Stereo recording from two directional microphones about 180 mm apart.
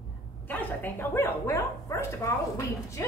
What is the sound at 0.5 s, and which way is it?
Speech, 10° left (ahead or behind).